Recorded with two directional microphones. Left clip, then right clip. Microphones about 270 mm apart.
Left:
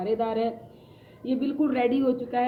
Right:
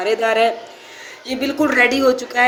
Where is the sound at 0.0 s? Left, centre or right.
Right.